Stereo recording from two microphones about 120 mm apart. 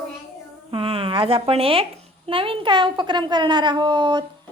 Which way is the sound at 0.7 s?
50° right (ahead or behind).